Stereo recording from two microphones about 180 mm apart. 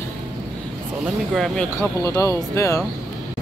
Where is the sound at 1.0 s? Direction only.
Centre (ahead or behind).